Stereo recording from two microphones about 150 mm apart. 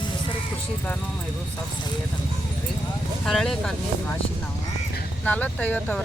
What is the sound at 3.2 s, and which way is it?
Speech, 5° left (ahead or behind).